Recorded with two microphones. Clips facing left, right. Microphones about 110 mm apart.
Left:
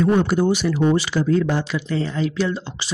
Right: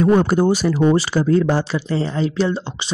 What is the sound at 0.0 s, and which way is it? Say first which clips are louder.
Speech: right 3 dB; 45° right (ahead or behind).